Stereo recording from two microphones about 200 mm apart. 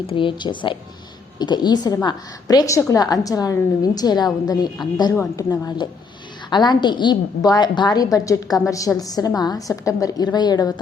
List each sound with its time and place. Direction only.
0.1 s a woman's voice: 25° left (ahead or behind)